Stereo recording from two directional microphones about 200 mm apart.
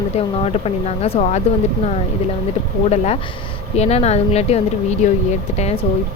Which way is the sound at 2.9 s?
35° left (ahead or behind).